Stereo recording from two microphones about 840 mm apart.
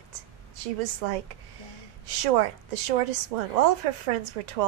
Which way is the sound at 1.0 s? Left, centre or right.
Right.